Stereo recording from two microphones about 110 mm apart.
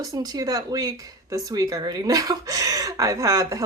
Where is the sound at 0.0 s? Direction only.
35° right (ahead or behind).